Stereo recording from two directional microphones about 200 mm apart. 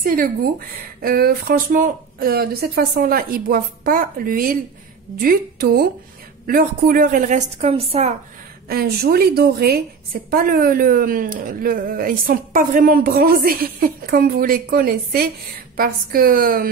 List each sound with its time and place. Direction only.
0.0 s a woman's voice: 45° right (ahead or behind)
8.6 s speech: 50° right (ahead or behind)